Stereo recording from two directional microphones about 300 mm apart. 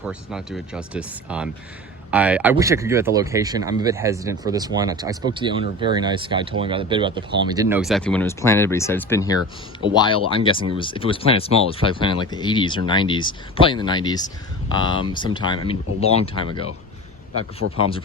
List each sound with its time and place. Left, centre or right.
0.0 s speech: centre
17.7 s speech: centre